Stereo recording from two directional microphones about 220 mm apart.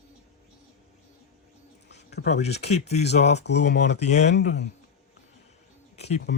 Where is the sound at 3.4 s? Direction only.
50° left (ahead or behind).